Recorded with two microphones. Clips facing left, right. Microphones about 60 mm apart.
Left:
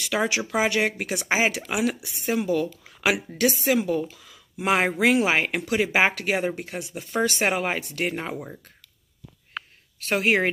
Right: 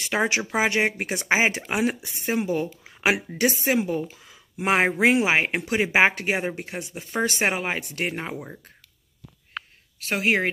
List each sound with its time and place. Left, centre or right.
0.1 s a woman's voice: right
1.7 s a woman's voice: right; by 8.5 s centre
9.9 s speech: centre